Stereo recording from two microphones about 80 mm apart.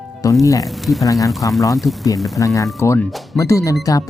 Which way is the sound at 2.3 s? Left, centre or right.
Left.